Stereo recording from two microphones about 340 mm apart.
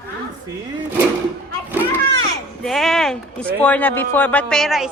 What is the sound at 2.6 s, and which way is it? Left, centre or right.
Speech, centre.